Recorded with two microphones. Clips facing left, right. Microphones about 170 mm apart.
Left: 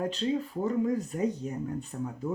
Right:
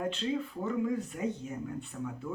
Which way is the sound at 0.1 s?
35° left (ahead or behind).